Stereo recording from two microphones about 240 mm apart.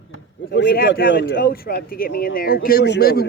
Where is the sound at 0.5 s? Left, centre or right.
Left.